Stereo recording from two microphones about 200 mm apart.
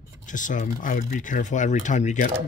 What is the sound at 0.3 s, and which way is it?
Speech, 40° left (ahead or behind).